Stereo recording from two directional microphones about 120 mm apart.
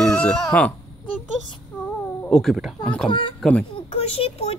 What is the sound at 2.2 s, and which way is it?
Speech, 5° left (ahead or behind).